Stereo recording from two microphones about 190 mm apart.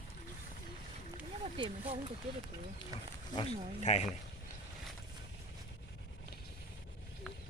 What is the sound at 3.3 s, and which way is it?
Speech, 30° left (ahead or behind).